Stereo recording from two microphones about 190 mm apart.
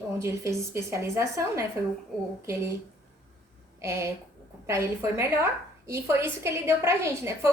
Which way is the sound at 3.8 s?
15° right (ahead or behind).